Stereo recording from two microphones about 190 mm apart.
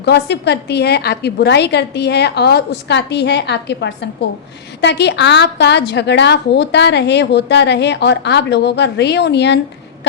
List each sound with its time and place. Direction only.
0.0 s a woman's voice: 60° left (ahead or behind)